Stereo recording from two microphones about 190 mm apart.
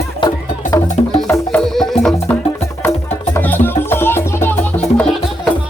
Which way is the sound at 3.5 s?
10° left (ahead or behind).